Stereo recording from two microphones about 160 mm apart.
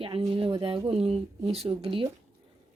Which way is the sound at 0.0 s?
35° right (ahead or behind).